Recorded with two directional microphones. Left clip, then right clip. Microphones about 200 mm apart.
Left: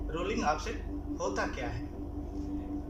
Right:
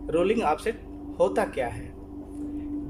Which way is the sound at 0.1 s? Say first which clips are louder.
Right 8 dB; 60° right (ahead or behind).